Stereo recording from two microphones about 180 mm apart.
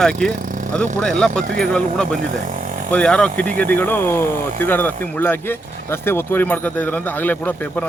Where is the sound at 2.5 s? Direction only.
45° right (ahead or behind).